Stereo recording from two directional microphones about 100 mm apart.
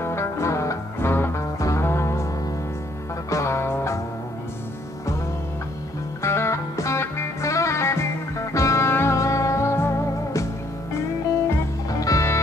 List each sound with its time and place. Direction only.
0.0 s music: 25° left (ahead or behind)
3.3 s music: 30° left (ahead or behind)
6.2 s music: 25° left (ahead or behind)
11.9 s music: 35° left (ahead or behind)